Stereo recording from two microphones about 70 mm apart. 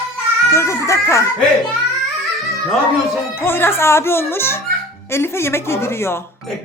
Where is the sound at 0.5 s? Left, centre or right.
Left.